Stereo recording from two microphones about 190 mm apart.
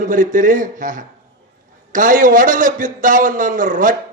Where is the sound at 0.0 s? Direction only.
45° right (ahead or behind).